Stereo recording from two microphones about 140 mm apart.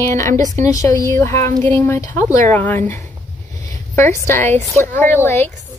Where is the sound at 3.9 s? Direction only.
20° left (ahead or behind).